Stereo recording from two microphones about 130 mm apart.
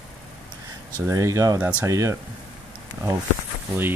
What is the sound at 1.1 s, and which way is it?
Speech, 25° right (ahead or behind).